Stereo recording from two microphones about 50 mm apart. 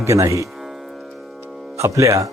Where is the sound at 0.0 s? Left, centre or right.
Right.